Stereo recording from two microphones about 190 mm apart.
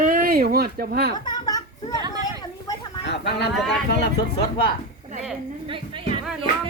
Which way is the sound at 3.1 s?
60° left (ahead or behind).